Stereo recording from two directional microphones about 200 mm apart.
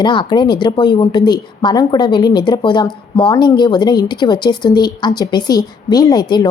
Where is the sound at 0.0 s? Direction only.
25° left (ahead or behind).